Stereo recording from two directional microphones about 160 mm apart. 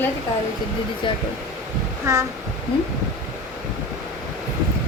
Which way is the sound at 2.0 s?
20° right (ahead or behind).